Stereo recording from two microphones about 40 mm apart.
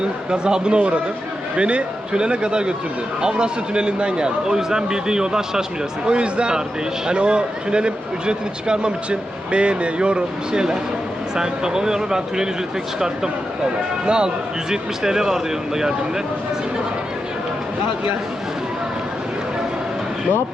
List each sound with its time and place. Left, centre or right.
0.0 s a man's voice: right
6.1 s a man's voice: right
14.0 s a man's voice: right
14.7 s speech: centre